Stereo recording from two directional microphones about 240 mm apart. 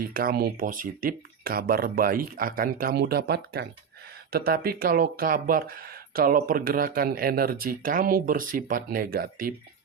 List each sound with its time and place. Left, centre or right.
0.0 s speech: right